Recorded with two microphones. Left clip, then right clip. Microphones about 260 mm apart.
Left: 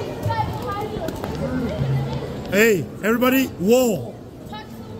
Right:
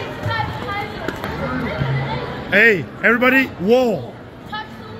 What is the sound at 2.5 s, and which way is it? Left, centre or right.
A man's voice, centre.